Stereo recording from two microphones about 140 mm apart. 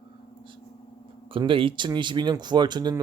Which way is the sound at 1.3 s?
40° right (ahead or behind).